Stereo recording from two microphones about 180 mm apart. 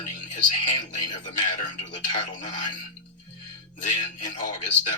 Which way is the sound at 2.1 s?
45° left (ahead or behind).